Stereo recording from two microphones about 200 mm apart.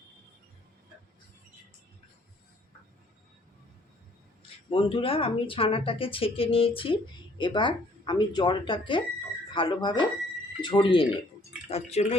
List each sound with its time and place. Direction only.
4.7 s speech: 25° left (ahead or behind)